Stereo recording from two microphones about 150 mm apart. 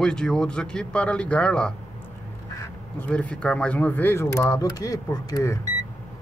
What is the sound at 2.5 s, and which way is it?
Duck, 20° left (ahead or behind).